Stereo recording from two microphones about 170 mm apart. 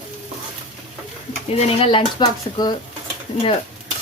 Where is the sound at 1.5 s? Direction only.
35° left (ahead or behind).